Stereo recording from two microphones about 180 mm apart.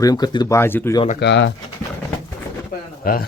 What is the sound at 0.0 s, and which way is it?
Speech, 20° left (ahead or behind).